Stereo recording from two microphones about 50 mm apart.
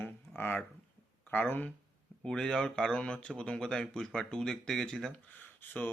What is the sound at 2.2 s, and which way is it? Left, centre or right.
Speech, centre.